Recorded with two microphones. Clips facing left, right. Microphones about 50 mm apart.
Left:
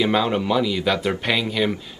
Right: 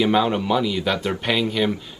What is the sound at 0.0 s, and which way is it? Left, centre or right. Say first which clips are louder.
Speech: right 1 dB; centre.